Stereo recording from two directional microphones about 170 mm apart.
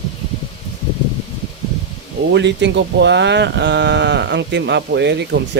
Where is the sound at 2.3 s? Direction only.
90° right.